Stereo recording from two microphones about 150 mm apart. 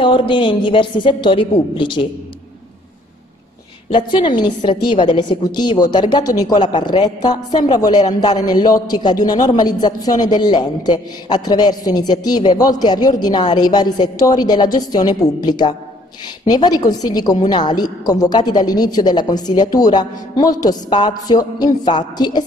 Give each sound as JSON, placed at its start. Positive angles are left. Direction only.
{"t": 0.0, "sound": "a woman's voice", "side_deg": 35}
{"t": 3.9, "sound": "a woman's voice", "side_deg": 30}